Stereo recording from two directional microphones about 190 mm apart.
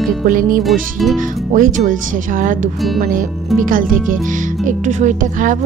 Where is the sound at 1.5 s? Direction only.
45° right (ahead or behind).